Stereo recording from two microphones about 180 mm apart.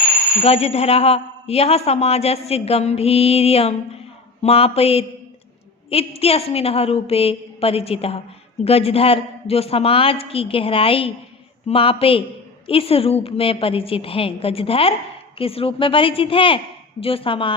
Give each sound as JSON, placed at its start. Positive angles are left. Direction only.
{"t": 0.4, "sound": "a woman's voice", "side_deg": 35}